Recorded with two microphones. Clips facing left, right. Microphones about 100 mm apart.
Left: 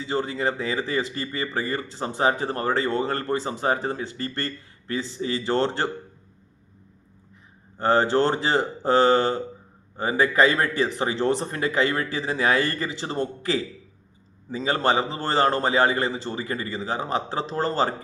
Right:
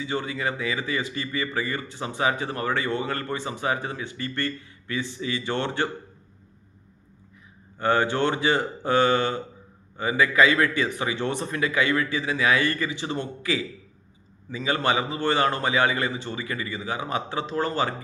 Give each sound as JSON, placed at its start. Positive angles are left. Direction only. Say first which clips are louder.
{"t": 0.0, "sound": "speech", "louder": "left 3 dB", "side_deg": 40}
{"t": 7.8, "sound": "speech", "louder": "left 3 dB", "side_deg": 35}